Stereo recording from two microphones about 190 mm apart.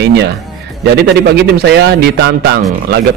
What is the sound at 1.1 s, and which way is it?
Speech, 60° right (ahead or behind).